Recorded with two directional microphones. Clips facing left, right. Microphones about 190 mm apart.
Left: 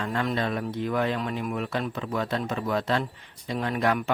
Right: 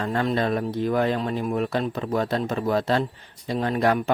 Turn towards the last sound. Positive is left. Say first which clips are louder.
# right 4 dB
turn(degrees=-35)  # may be behind; listen again after turning